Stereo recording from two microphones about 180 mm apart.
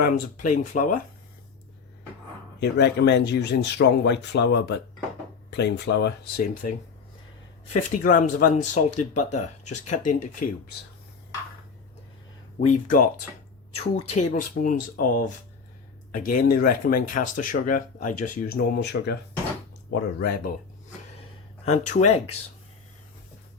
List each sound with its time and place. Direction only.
0.5 s speech: 45° left (ahead or behind)
2.6 s speech: 65° left (ahead or behind); by 10.5 s 45° left (ahead or behind)
12.5 s speech: 50° left (ahead or behind)
13.7 s speech: 35° left (ahead or behind)
18.8 s speech: 65° left (ahead or behind)
21.6 s speech: 40° left (ahead or behind)